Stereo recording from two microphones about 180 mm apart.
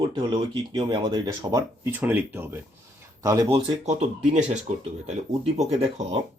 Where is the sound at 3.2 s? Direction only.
25° right (ahead or behind).